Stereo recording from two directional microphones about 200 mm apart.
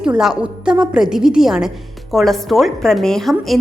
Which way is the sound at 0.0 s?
5° right (ahead or behind).